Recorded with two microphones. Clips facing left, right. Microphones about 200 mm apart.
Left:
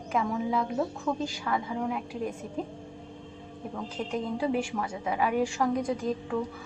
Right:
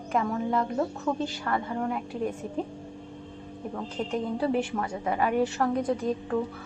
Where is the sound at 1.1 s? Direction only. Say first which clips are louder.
Right 2 dB; 5° right (ahead or behind).